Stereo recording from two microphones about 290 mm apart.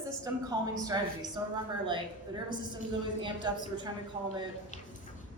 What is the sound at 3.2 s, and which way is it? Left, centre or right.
Speech, centre.